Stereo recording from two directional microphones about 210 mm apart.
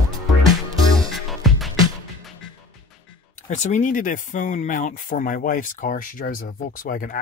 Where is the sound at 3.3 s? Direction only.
35° left (ahead or behind).